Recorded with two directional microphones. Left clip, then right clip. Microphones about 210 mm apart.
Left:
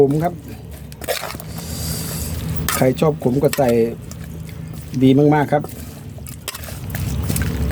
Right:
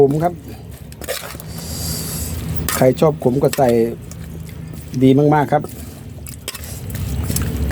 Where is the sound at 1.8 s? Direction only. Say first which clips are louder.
Right 1 dB; 5° right (ahead or behind).